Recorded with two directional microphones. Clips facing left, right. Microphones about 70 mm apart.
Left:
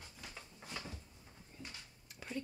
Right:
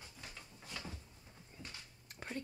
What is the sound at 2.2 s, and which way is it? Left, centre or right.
Whispering, right.